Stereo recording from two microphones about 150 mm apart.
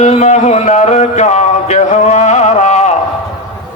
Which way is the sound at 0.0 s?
50° left (ahead or behind).